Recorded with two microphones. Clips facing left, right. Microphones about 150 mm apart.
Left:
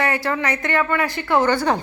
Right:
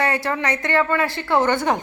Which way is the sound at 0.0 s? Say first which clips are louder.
Even; 25° right (ahead or behind).